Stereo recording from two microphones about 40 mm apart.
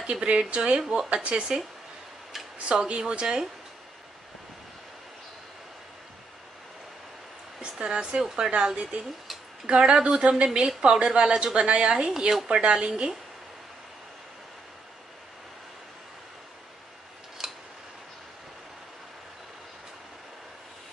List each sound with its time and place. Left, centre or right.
0.0 s speech: right
1.2 s speech: right
2.7 s speech: right
7.8 s speech: right
17.4 s a sound: centre